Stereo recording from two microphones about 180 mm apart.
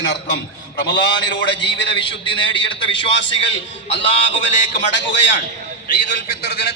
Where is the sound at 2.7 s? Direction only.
85° left.